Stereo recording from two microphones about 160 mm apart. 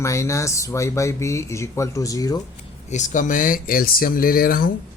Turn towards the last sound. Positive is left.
turn(degrees=65)  # may be behind; listen again after turning